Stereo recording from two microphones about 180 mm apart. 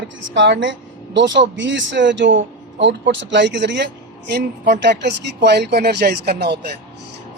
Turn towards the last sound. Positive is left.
turn(degrees=-65)  # may be behind; listen again after turning